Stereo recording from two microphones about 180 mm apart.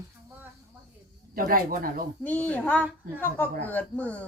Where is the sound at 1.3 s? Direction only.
50° right (ahead or behind).